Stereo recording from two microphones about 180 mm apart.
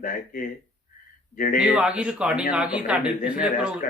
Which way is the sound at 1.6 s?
5° right (ahead or behind).